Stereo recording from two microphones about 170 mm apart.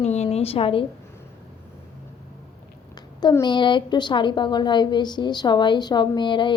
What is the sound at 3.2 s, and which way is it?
A woman's voice, 20° left (ahead or behind).